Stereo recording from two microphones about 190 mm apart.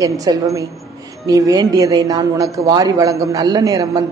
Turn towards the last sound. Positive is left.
turn(degrees=-20)  # may be behind; listen again after turning